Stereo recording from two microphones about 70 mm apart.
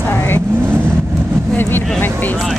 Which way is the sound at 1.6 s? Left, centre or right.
Left.